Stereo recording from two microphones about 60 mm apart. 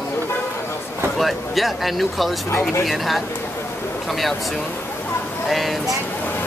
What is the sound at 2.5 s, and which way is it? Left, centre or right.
Speech, left.